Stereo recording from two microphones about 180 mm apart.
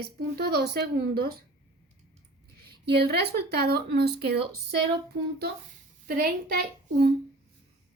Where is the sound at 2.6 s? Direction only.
60° right (ahead or behind).